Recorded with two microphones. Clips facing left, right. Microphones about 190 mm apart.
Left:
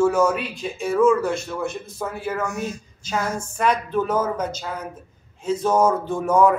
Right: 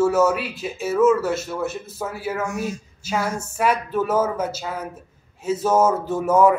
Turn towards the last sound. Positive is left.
turn(degrees=-5)  # may be behind; listen again after turning